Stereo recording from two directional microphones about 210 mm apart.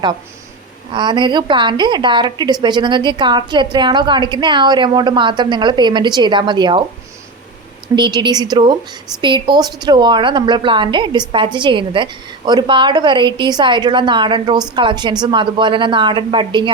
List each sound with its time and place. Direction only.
0.9 s a woman's voice: 20° right (ahead or behind)
7.9 s a woman's voice: 20° right (ahead or behind)